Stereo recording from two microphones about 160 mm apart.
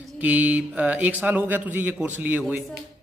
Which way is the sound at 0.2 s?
10° right (ahead or behind).